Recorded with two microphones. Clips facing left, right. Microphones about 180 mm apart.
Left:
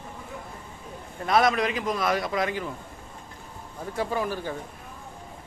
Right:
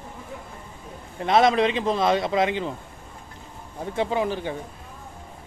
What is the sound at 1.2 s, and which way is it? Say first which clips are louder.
A man's voice: right 4 dB; 25° right (ahead or behind).